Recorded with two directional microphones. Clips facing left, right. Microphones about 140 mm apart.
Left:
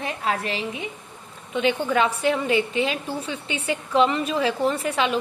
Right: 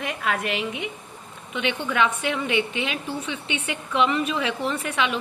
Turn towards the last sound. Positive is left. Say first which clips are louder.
# left 3 dB
turn(degrees=35)  # may be behind; listen again after turning